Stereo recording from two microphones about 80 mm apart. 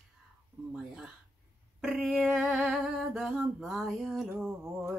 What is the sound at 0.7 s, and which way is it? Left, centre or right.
Speech, centre.